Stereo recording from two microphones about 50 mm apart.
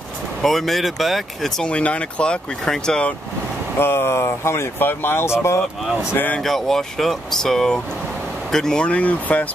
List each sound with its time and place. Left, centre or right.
0.4 s speech: centre
1.7 s speech: left
3.7 s speech: left
4.7 s speech: left
5.2 s speech: left
6.4 s speech: centre
8.8 s speech: left